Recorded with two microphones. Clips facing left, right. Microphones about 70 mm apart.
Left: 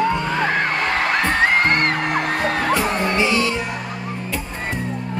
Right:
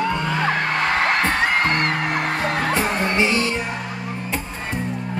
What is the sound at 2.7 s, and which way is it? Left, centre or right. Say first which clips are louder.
Music: left 1 dB; right.